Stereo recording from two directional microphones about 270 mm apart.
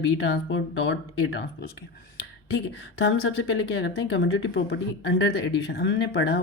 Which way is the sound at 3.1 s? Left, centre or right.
Left.